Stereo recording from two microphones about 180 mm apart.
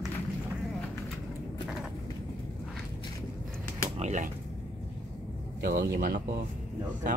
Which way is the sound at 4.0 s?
40° right (ahead or behind).